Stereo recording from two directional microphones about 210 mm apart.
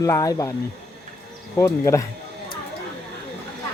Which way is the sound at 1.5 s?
15° left (ahead or behind).